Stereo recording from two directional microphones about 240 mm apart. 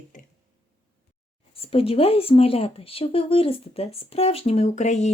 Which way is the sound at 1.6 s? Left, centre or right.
Left.